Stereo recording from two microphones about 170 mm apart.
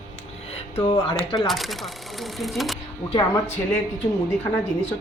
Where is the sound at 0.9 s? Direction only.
30° left (ahead or behind).